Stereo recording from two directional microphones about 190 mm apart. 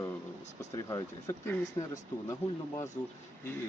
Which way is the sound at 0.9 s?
15° left (ahead or behind).